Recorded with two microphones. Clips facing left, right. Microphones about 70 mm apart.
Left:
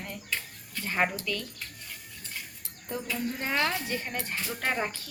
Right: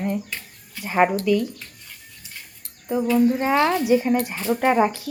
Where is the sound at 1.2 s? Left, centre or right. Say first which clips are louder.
Right 14 dB; centre.